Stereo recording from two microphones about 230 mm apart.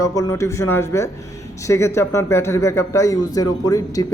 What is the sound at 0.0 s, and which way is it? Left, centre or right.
A man's voice, centre.